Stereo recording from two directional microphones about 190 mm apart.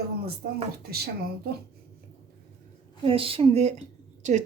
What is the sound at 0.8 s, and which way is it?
Speech, 55° right (ahead or behind).